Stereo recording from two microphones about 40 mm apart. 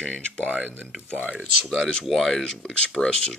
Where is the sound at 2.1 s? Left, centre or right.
Centre.